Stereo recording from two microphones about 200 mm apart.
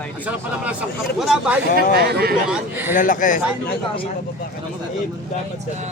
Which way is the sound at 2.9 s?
40° left (ahead or behind).